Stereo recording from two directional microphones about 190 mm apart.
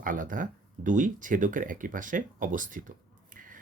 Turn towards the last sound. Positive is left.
turn(degrees=-45)  # may be behind; listen again after turning